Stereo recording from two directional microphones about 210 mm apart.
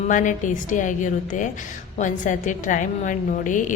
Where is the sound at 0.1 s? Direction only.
40° left (ahead or behind).